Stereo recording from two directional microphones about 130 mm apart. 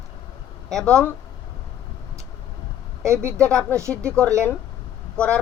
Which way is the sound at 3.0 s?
20° right (ahead or behind).